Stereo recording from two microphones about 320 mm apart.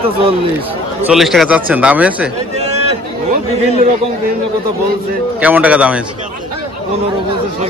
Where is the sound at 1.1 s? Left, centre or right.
Centre.